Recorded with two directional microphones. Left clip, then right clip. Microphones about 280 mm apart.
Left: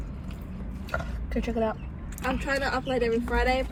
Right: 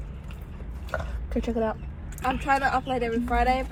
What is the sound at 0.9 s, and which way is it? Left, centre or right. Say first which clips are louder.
Speech: right 1 dB; centre.